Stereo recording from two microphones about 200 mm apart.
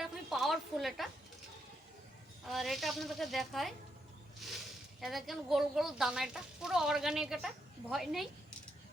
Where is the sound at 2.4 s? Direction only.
Centre (ahead or behind).